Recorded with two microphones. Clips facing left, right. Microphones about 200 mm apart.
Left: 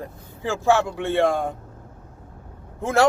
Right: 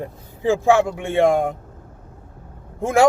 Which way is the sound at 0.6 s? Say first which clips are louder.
Even; 15° right (ahead or behind).